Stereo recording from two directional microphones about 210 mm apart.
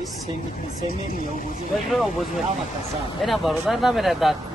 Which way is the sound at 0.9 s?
45° left (ahead or behind).